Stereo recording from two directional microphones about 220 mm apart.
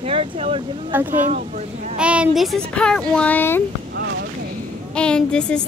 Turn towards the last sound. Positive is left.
turn(degrees=5)  # may be behind; listen again after turning